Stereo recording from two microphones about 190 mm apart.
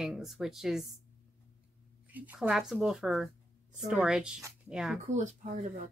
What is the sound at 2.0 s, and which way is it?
A woman's voice, 10° right (ahead or behind).